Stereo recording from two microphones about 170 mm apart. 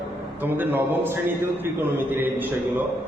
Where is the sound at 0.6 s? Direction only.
10° right (ahead or behind).